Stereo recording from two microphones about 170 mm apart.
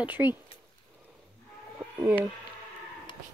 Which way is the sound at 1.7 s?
15° right (ahead or behind).